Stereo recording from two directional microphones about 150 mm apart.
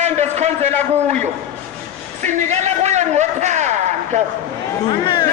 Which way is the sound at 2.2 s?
50° right (ahead or behind).